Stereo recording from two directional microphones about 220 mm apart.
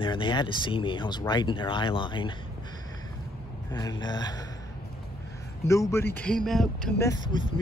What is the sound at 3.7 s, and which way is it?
Speech, 15° left (ahead or behind).